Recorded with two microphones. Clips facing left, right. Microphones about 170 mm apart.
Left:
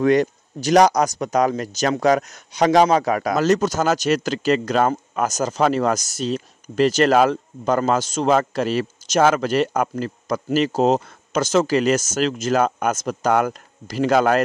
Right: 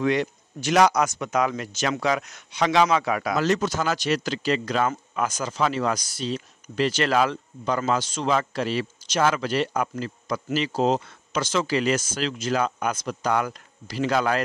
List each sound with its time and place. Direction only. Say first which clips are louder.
0.0 s speech: left 6 dB; 45° left (ahead or behind)